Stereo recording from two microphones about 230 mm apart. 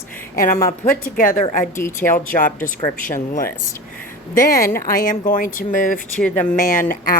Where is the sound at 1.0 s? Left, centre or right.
Left.